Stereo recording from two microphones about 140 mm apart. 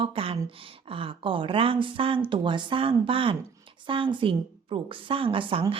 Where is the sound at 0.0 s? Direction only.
40° right (ahead or behind).